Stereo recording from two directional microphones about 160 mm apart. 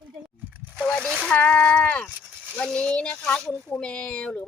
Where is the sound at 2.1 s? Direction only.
5° right (ahead or behind).